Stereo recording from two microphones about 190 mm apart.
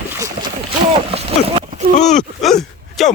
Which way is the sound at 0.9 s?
30° right (ahead or behind).